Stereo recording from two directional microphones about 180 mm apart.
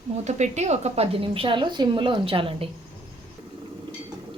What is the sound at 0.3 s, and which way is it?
A woman's voice, 40° right (ahead or behind).